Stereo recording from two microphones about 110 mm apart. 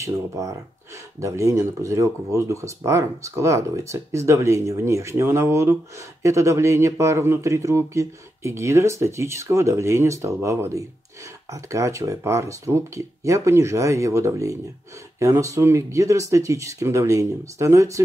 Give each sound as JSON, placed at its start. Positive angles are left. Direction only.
{"t": 0.0, "sound": "speech", "side_deg": -30}